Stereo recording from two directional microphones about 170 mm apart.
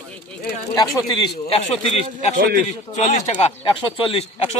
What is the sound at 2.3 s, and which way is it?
Speech, 50° right (ahead or behind).